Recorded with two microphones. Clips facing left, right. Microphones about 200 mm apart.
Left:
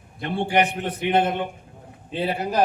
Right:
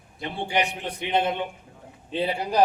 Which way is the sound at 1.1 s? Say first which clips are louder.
Left 3 dB; 50° left (ahead or behind).